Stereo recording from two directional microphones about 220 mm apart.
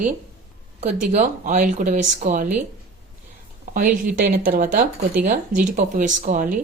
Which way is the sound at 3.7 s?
40° right (ahead or behind).